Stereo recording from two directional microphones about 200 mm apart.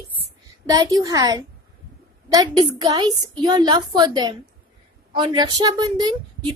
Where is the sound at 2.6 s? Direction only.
20° right (ahead or behind).